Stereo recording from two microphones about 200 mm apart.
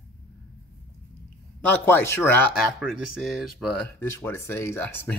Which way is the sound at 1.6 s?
10° left (ahead or behind).